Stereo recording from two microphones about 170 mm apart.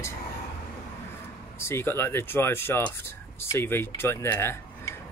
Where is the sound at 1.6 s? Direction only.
15° left (ahead or behind).